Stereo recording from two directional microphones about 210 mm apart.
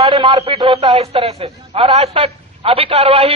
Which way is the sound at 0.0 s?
20° right (ahead or behind).